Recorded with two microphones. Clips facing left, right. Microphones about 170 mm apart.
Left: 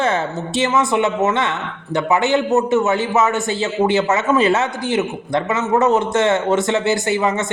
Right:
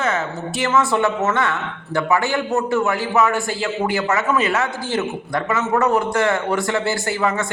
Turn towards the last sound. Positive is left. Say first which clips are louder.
# left 3 dB
turn(degrees=20)  # may be behind; listen again after turning